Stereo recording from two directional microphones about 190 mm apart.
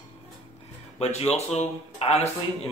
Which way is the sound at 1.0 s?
35° left (ahead or behind).